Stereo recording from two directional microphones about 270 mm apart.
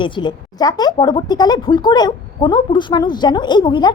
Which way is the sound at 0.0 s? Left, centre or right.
Centre.